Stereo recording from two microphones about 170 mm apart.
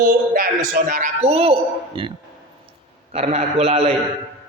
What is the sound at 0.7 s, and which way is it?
A woman's voice, 50° right (ahead or behind).